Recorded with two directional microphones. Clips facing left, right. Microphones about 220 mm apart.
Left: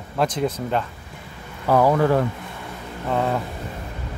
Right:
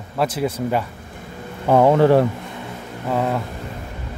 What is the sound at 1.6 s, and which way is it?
Speech, 25° right (ahead or behind).